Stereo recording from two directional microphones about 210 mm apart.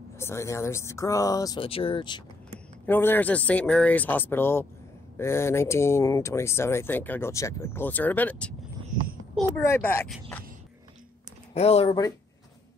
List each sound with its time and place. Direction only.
0.2 s speech: 15° left (ahead or behind)
2.9 s speech: 10° left (ahead or behind)
9.6 s speech: 10° left (ahead or behind)
11.5 s speech: 30° left (ahead or behind)